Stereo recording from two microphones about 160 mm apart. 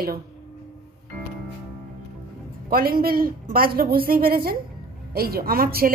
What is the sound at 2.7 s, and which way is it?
A woman's voice, 70° right (ahead or behind).